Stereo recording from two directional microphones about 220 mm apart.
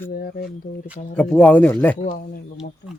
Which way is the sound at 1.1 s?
5° left (ahead or behind).